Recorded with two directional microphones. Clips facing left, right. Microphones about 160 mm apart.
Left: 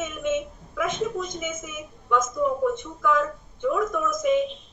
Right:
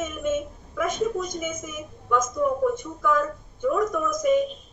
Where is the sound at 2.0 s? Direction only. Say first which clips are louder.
Even; centre (ahead or behind).